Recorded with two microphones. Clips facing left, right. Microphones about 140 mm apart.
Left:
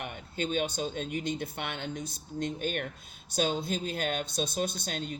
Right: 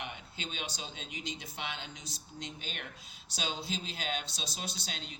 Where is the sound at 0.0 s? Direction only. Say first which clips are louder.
Left 8 dB; 50° left (ahead or behind).